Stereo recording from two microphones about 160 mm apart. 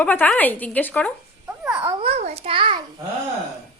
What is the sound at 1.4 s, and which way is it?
Dog, 10° right (ahead or behind).